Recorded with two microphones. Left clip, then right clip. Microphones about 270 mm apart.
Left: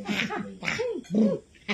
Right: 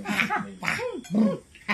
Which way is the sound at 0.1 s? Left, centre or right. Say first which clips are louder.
Right 4 dB; centre.